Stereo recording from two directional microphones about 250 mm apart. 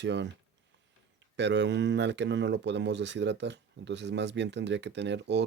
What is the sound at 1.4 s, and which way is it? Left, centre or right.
Speech, right.